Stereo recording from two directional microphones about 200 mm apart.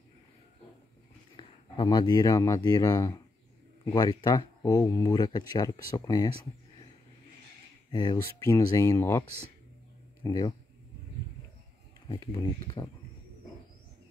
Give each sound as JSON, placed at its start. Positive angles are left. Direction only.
{"t": 1.3, "sound": "speech", "side_deg": 20}
{"t": 7.9, "sound": "speech", "side_deg": 20}
{"t": 10.2, "sound": "speech", "side_deg": 20}
{"t": 12.1, "sound": "speech", "side_deg": 25}